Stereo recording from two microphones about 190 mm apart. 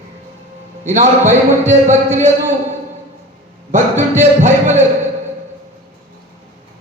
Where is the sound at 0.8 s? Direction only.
40° right (ahead or behind).